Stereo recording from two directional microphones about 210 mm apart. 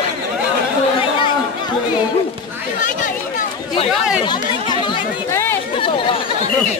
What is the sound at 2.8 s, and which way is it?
Chatter, 40° left (ahead or behind).